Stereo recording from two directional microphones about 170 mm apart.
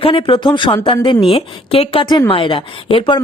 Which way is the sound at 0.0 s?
30° left (ahead or behind).